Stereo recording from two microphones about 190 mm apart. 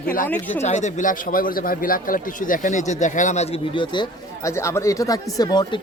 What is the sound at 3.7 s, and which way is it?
Speech, 25° left (ahead or behind).